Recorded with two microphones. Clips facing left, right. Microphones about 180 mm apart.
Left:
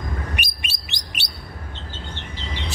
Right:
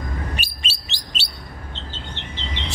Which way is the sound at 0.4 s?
15° left (ahead or behind).